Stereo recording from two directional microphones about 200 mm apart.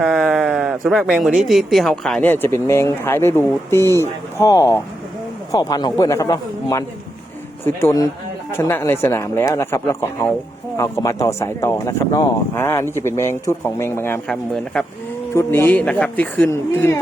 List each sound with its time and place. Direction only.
0.0 s speech: centre (ahead or behind)